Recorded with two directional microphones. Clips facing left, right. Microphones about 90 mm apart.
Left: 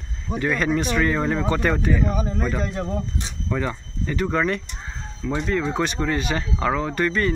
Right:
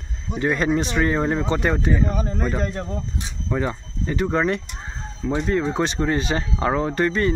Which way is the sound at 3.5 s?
25° right (ahead or behind).